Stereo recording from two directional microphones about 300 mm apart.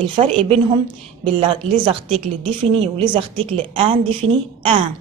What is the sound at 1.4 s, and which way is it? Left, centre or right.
A woman's voice, centre.